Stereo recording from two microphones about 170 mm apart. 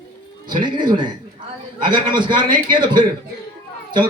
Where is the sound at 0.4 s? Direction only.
25° right (ahead or behind).